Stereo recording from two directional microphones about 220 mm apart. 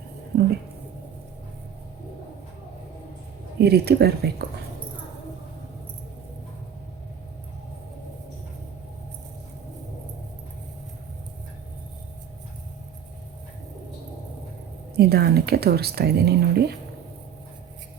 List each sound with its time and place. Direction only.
3.6 s speech: 50° right (ahead or behind)
14.9 s speech: 45° right (ahead or behind)